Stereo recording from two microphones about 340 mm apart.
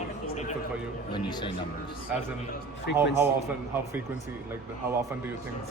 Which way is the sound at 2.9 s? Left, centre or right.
Left.